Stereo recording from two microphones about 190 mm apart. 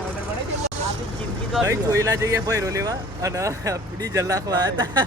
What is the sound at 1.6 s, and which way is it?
Speech, 15° right (ahead or behind).